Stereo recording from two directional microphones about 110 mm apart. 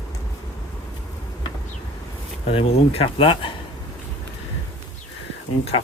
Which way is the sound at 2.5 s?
65° left (ahead or behind).